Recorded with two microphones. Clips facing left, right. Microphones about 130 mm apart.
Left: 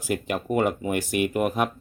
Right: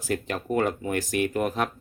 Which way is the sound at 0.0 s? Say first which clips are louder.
Left 2 dB; 10° left (ahead or behind).